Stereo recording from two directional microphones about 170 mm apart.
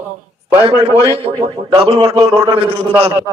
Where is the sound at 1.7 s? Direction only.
35° right (ahead or behind).